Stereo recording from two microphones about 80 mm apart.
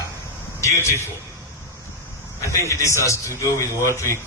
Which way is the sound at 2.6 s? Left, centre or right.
Left.